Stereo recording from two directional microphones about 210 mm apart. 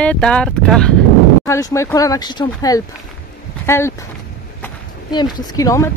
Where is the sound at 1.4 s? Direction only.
15° left (ahead or behind).